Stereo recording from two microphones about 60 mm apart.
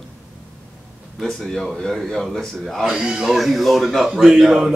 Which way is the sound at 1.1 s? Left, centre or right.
Centre.